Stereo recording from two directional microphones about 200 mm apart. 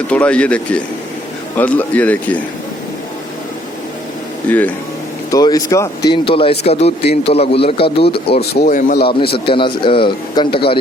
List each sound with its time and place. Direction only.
0.1 s speech: 5° left (ahead or behind)
4.4 s a man's voice: 10° left (ahead or behind); by 8.0 s 25° left (ahead or behind)
8.3 s speech: 55° left (ahead or behind)
9.5 s a man's voice: 25° left (ahead or behind)